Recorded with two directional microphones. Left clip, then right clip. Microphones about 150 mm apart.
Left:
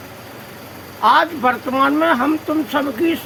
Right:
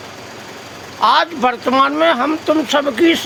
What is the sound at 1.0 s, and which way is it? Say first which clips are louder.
Speech: right 1 dB; 60° right (ahead or behind).